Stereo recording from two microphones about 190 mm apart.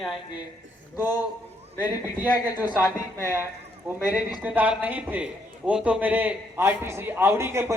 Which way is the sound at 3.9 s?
10° right (ahead or behind).